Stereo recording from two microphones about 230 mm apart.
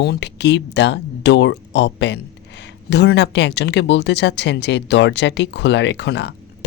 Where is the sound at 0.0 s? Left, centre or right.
Left.